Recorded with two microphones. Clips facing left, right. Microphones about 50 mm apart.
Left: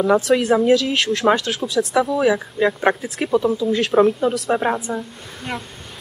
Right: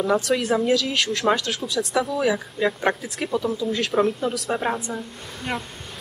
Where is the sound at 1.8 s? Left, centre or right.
Centre.